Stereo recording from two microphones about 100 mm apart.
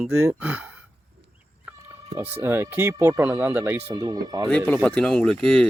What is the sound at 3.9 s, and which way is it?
Speech, 40° right (ahead or behind).